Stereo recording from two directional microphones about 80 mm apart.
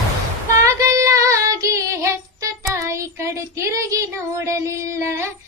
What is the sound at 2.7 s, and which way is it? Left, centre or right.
Child singing, right.